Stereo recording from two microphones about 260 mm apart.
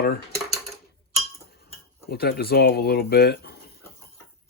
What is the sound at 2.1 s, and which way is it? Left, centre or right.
Speech, left.